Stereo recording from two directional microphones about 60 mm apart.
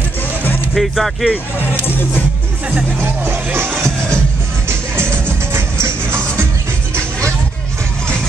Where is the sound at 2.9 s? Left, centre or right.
Right.